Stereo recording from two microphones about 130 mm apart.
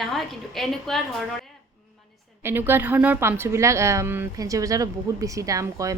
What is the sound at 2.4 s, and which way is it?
A woman's voice, 20° right (ahead or behind).